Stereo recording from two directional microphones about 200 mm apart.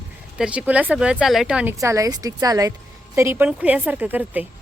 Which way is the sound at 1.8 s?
15° right (ahead or behind).